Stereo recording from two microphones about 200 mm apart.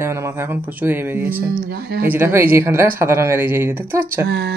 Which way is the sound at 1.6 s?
50° right (ahead or behind).